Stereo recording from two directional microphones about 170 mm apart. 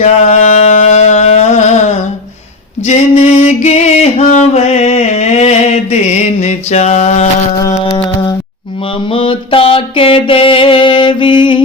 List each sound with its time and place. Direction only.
0.0 s music: 45° left (ahead or behind)
2.8 s a sound: 40° left (ahead or behind)
7.9 s mantra: 30° left (ahead or behind)